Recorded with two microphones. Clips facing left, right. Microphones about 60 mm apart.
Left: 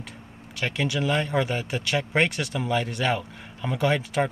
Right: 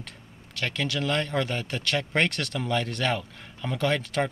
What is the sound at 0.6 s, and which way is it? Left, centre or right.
Speech, centre.